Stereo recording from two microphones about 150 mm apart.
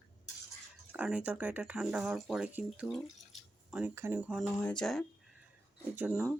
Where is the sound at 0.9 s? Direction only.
10° right (ahead or behind).